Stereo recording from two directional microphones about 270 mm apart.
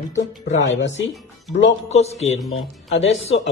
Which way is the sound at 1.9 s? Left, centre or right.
Left.